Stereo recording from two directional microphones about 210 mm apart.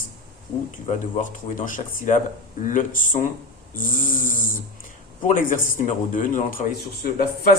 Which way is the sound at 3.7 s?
40° left (ahead or behind).